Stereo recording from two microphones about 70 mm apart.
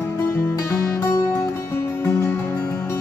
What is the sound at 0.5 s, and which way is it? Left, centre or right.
Music, left.